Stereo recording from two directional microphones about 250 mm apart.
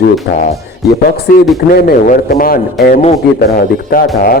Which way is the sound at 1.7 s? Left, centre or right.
Left.